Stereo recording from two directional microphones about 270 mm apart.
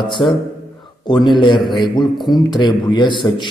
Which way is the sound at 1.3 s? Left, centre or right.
Centre.